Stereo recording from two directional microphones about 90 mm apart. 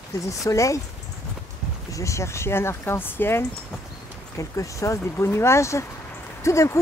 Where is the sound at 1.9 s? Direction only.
35° left (ahead or behind).